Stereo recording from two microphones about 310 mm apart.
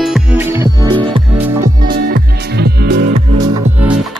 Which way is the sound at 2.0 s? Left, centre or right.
Right.